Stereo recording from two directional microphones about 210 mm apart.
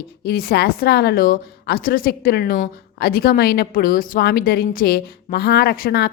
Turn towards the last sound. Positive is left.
turn(degrees=45)  # may be behind; listen again after turning